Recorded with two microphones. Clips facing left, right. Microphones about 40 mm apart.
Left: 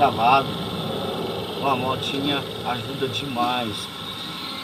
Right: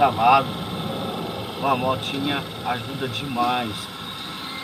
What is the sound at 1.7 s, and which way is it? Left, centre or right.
Speech, centre.